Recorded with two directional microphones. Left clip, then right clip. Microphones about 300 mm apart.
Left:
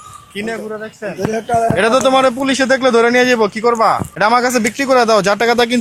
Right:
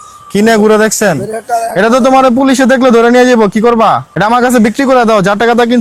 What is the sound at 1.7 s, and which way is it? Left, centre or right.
A man's voice, right.